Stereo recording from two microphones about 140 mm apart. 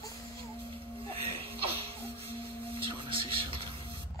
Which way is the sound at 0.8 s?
40° right (ahead or behind).